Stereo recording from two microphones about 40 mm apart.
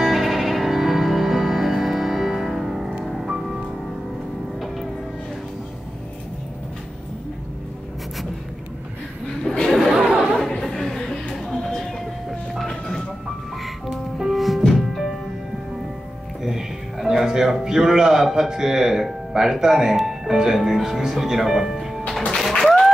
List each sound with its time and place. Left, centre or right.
0.0 s music: centre
9.4 s chatter: centre
9.9 s chatter: centre
10.9 s a sound: centre
12.3 s vehicle: centre
13.8 s music: centre
16.4 s music: centre
18.3 s speech: centre
22.4 s music: centre